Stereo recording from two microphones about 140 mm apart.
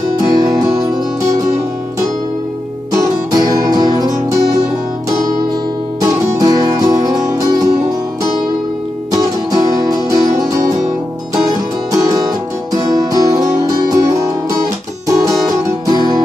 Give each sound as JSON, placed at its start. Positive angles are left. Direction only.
{"t": 3.0, "sound": "music", "side_deg": -30}
{"t": 5.9, "sound": "music", "side_deg": -25}
{"t": 9.1, "sound": "music", "side_deg": -25}
{"t": 11.9, "sound": "music", "side_deg": -25}
{"t": 15.0, "sound": "music", "side_deg": -25}